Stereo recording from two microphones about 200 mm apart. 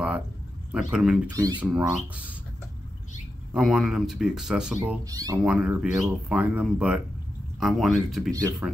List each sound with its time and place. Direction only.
0.7 s speech: 5° right (ahead or behind)
1.3 s speech: 20° right (ahead or behind)
1.6 s speech: 5° right (ahead or behind)
3.5 s speech: centre (ahead or behind)
5.0 s speech: 20° right (ahead or behind)
5.4 s speech: 5° right (ahead or behind)